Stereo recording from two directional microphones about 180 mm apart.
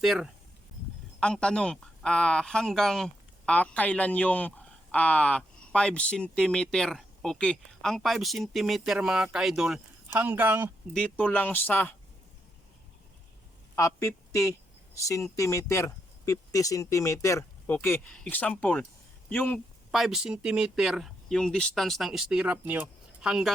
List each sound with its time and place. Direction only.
0.0 s speech: centre (ahead or behind)
10.9 s speech: 10° left (ahead or behind)
13.7 s a man's voice: 15° left (ahead or behind)
19.9 s speech: centre (ahead or behind)